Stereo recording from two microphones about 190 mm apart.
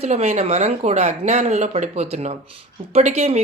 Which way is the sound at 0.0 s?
35° right (ahead or behind).